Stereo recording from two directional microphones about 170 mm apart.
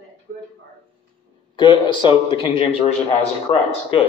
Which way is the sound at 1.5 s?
25° left (ahead or behind).